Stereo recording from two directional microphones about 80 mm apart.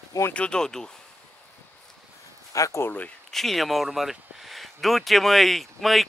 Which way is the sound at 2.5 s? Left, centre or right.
Left.